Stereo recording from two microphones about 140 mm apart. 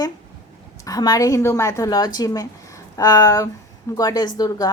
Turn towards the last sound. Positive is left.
turn(degrees=25)  # may be behind; listen again after turning